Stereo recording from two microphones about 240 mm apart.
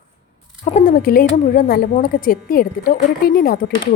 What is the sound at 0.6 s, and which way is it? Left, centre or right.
A woman's voice, left.